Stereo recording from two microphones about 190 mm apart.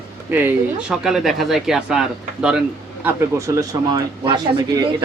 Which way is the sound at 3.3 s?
15° right (ahead or behind).